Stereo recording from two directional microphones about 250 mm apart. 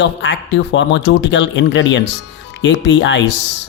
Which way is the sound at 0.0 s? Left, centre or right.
Left.